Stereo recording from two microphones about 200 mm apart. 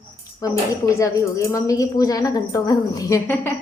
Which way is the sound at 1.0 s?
15° left (ahead or behind).